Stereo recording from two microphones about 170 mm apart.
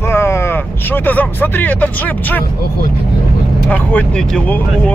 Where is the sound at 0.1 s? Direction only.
15° left (ahead or behind).